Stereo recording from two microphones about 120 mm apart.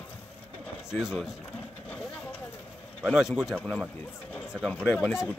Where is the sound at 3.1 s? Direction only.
Centre (ahead or behind).